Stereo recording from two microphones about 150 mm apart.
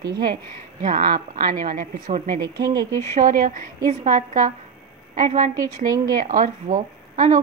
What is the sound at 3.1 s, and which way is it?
A woman's voice, 60° right (ahead or behind).